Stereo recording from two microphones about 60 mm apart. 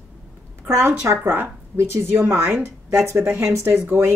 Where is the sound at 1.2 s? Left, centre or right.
Right.